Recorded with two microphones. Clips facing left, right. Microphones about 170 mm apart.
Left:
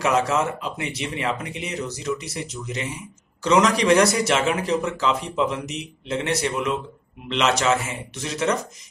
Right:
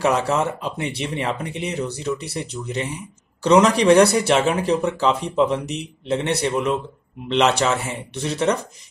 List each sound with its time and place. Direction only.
0.0 s speech: 30° right (ahead or behind)